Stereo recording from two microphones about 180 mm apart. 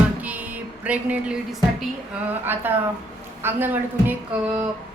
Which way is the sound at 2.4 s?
10° right (ahead or behind).